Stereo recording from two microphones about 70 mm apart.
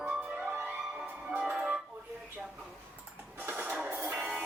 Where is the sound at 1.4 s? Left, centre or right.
Centre.